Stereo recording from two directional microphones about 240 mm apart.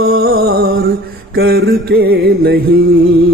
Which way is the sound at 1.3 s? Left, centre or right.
Right.